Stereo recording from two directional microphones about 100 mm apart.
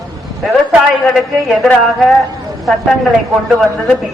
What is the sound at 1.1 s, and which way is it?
Speech, 5° right (ahead or behind).